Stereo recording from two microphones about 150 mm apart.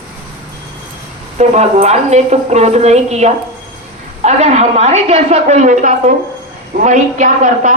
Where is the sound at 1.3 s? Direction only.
45° right (ahead or behind).